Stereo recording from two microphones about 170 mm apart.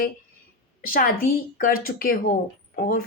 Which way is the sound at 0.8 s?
55° left (ahead or behind).